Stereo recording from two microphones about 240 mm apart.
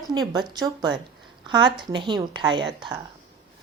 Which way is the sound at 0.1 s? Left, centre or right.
Centre.